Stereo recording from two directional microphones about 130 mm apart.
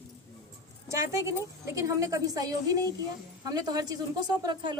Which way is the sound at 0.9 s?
25° right (ahead or behind).